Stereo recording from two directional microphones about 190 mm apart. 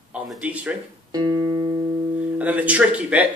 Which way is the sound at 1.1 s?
20° right (ahead or behind).